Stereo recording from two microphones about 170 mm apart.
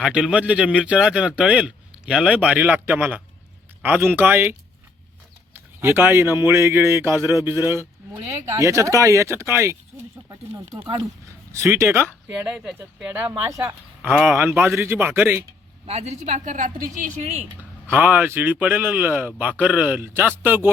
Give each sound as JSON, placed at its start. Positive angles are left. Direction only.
{"t": 0.0, "sound": "a man's voice", "side_deg": -5}
{"t": 5.8, "sound": "speech", "side_deg": -15}
{"t": 15.9, "sound": "a woman's voice", "side_deg": -40}
{"t": 17.6, "sound": "speech", "side_deg": -10}